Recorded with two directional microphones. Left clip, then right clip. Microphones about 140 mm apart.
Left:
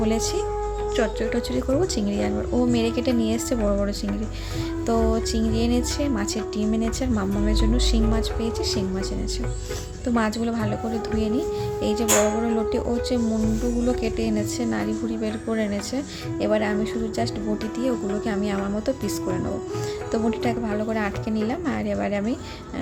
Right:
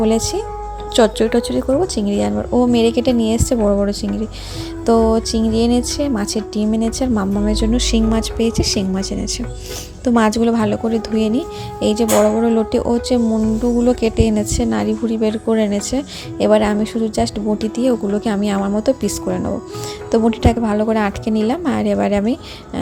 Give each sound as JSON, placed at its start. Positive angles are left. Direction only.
{"t": 0.0, "sound": "speech", "side_deg": -40}
{"t": 2.0, "sound": "speech", "side_deg": -40}
{"t": 4.9, "sound": "speech", "side_deg": -40}